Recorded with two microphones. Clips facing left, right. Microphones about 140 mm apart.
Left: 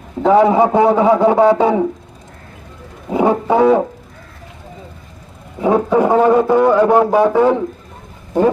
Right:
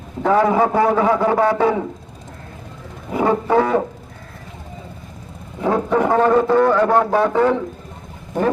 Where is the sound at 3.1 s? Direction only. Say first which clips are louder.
Left 3 dB; 15° left (ahead or behind).